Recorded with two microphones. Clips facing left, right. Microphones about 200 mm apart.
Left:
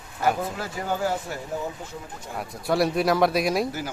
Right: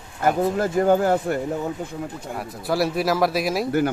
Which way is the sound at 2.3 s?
Centre (ahead or behind).